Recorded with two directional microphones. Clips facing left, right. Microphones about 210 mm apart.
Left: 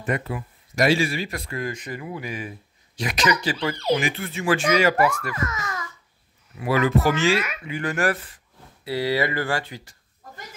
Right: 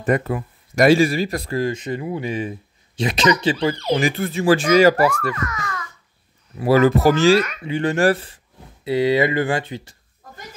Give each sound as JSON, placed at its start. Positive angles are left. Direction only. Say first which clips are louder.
{"t": 0.0, "sound": "speech", "louder": "right 7 dB", "side_deg": -45}
{"t": 3.9, "sound": "speech", "louder": "right 1 dB", "side_deg": -40}
{"t": 5.3, "sound": "a child's voice", "louder": "right 2 dB", "side_deg": 25}
{"t": 6.6, "sound": "speech", "louder": "right 6 dB", "side_deg": -40}
{"t": 7.6, "sound": "speech", "louder": "right 7 dB", "side_deg": -25}